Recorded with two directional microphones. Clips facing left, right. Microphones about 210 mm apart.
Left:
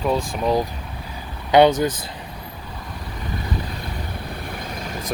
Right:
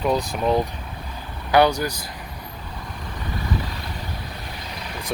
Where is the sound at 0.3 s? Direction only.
Centre (ahead or behind).